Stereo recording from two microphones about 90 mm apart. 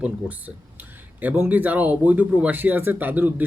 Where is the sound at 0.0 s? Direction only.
15° right (ahead or behind).